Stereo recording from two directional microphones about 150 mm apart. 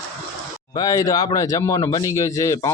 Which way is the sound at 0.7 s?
25° left (ahead or behind).